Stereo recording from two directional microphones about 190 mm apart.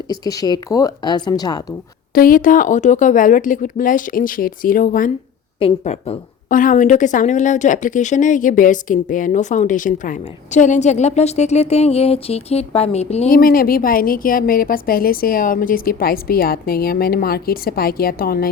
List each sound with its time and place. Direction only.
0.1 s a woman's voice: 20° left (ahead or behind)
2.1 s a woman's voice: 50° left (ahead or behind)
5.5 s a woman's voice: 35° left (ahead or behind)
13.3 s a woman's voice: 50° left (ahead or behind)